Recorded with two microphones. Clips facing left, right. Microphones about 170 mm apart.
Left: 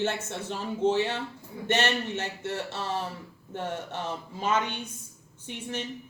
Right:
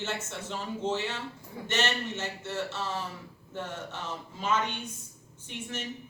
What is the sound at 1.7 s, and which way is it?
A woman's voice, 55° left (ahead or behind).